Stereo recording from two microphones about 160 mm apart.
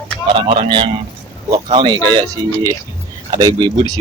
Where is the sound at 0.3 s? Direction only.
30° right (ahead or behind).